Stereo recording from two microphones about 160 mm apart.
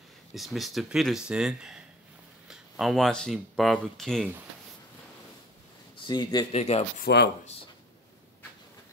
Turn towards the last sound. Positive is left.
turn(degrees=90)